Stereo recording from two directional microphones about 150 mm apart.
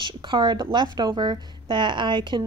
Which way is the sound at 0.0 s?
30° right (ahead or behind).